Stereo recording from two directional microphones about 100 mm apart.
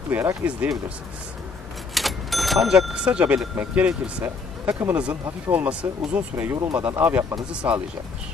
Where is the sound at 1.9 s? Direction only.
Centre (ahead or behind).